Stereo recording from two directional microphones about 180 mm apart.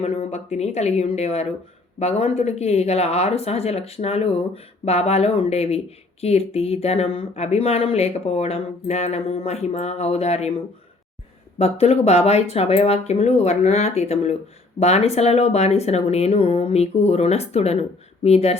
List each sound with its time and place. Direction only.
0.0 s speech: 35° left (ahead or behind)
11.5 s speech: 35° left (ahead or behind)